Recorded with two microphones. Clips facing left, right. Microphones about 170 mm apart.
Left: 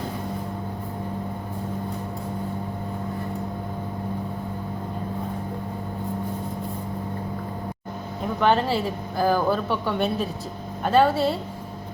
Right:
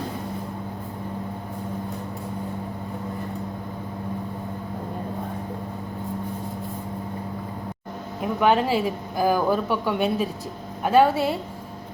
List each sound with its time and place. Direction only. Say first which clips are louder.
8.2 s a woman's voice: right 1 dB; 10° right (ahead or behind)